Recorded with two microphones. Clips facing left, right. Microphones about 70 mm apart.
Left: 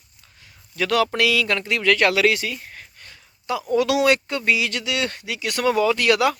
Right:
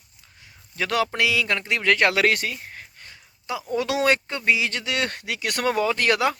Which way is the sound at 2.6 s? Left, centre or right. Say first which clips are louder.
Even; right.